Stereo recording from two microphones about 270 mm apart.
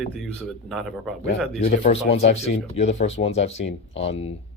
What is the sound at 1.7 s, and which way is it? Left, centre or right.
Speech, left.